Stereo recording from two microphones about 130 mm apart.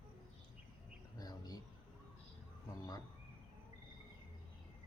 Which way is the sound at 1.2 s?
30° left (ahead or behind).